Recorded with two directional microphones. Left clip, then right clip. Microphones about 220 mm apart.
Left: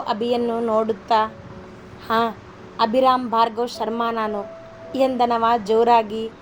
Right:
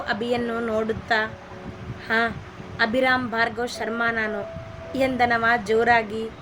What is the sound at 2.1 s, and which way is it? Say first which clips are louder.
Speech: left 2 dB; 15° right (ahead or behind).